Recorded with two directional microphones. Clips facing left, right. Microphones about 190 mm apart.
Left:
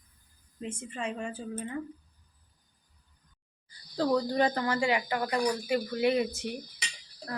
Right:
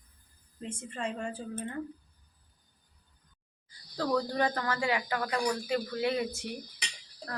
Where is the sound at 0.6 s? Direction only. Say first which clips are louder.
Left 1 dB; 5° left (ahead or behind).